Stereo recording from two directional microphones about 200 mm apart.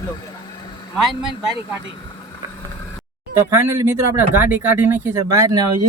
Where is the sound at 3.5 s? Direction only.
15° right (ahead or behind).